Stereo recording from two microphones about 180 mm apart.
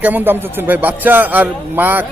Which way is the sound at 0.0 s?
10° right (ahead or behind).